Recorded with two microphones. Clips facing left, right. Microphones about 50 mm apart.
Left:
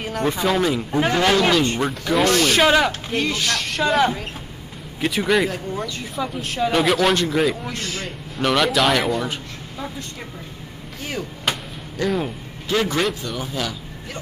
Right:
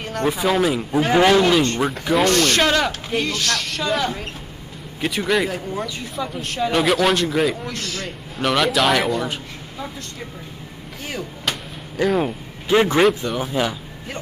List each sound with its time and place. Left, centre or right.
0.0 s a man's voice: centre
5.0 s speech: centre
12.0 s speech: centre
12.6 s a man's voice: right